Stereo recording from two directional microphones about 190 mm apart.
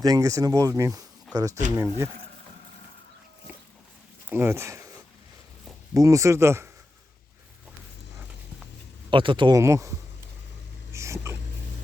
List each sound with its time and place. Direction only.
0.0 s speech: 20° right (ahead or behind)
4.3 s speech: 10° right (ahead or behind)
5.9 s speech: 15° right (ahead or behind)
9.0 s speech: 25° right (ahead or behind)
10.9 s a sound: 15° right (ahead or behind)